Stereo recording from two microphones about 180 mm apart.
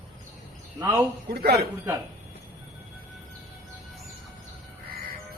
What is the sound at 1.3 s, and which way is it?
Speech, 60° right (ahead or behind).